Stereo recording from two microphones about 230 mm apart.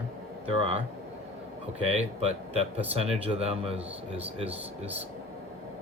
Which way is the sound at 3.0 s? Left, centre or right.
Right.